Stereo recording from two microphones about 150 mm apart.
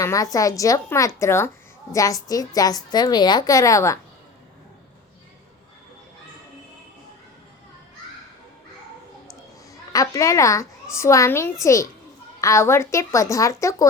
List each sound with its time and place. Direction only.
0.0 s a woman's voice: 20° left (ahead or behind)
9.9 s a child's voice: 25° left (ahead or behind)